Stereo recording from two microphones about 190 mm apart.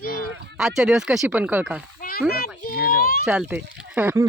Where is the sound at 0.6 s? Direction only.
5° right (ahead or behind).